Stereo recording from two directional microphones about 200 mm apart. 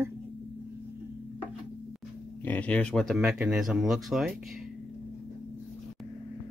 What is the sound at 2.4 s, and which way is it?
Speech, 5° left (ahead or behind).